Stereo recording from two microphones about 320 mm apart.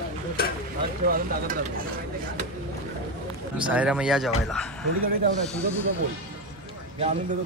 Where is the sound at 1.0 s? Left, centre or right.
Right.